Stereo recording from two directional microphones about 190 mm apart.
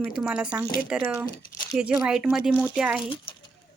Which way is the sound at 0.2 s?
5° right (ahead or behind).